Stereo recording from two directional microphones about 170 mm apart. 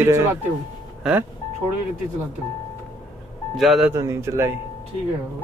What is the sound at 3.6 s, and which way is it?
Speech, centre (ahead or behind).